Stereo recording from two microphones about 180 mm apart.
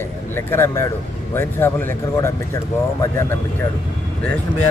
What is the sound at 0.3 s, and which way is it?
Speech, 15° left (ahead or behind).